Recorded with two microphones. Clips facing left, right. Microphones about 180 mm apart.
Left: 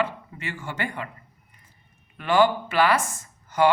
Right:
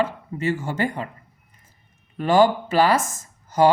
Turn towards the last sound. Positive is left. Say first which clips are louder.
# right 3 dB
turn(degrees=-40)  # may be behind; listen again after turning